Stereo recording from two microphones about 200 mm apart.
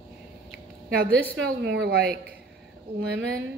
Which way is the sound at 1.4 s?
50° right (ahead or behind).